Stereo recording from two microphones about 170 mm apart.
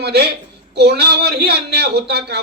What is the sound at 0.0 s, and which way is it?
A woman's voice, 75° right (ahead or behind).